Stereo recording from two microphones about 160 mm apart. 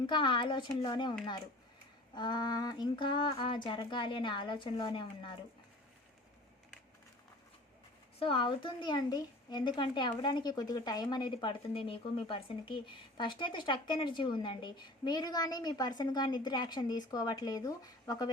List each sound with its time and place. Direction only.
0.0 s a woman's voice: 30° left (ahead or behind)
2.1 s a woman's voice: 30° left (ahead or behind)
8.2 s a woman's voice: 35° left (ahead or behind)